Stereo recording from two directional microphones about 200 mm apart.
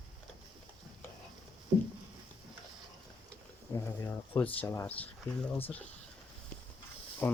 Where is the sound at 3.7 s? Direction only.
10° left (ahead or behind).